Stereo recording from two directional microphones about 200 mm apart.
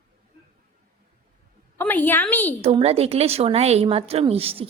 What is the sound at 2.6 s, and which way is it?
A woman's voice, 30° right (ahead or behind).